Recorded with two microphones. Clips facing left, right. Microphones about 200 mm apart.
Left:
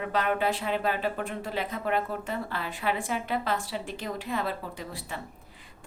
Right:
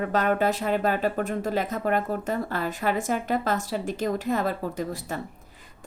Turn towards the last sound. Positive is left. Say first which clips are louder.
# right 7 dB
turn(degrees=-45)  # may be behind; listen again after turning